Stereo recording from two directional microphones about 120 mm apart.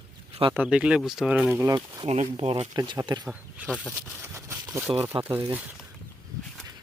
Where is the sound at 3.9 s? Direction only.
20° right (ahead or behind).